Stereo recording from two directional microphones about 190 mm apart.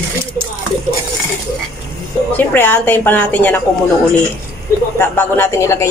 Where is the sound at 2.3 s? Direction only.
10° left (ahead or behind).